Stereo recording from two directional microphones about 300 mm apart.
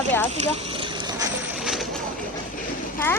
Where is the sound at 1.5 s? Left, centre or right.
Centre.